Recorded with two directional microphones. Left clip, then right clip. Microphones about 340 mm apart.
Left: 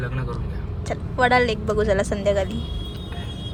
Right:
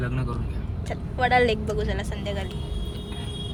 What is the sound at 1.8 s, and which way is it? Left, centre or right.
Speech, centre.